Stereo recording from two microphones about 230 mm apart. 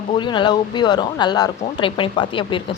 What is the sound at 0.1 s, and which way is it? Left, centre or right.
Speech, centre.